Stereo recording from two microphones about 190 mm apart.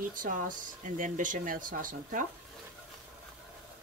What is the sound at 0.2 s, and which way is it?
Speech, 45° right (ahead or behind).